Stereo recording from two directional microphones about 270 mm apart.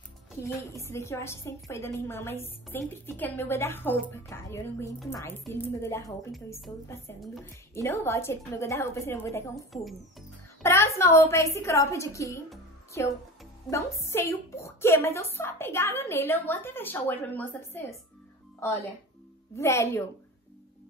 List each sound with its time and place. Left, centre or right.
0.6 s a woman's voice: centre
10.6 s a woman's voice: centre
13.7 s a woman's voice: centre